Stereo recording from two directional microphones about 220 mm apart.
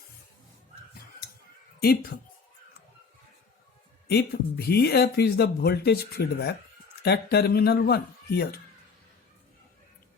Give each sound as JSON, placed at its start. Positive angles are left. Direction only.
{"t": 1.8, "sound": "speech", "side_deg": 45}
{"t": 4.1, "sound": "speech", "side_deg": 45}